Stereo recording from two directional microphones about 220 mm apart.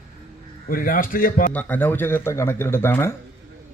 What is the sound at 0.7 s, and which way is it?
Speech, 40° left (ahead or behind).